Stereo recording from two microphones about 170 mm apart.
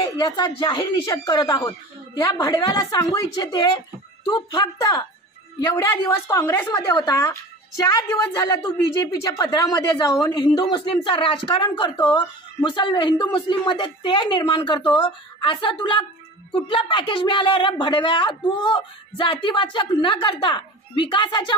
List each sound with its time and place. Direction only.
0.2 s a woman's voice: 25° left (ahead or behind)